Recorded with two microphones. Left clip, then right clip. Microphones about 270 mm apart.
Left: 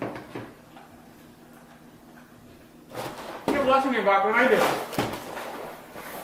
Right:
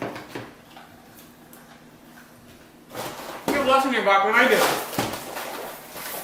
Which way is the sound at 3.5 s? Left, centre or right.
Centre.